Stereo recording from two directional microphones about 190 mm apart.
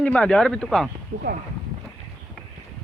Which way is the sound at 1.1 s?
40° right (ahead or behind).